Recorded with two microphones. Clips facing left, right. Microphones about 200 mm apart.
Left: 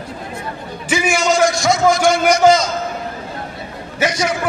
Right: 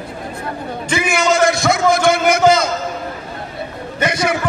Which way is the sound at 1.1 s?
60° right (ahead or behind).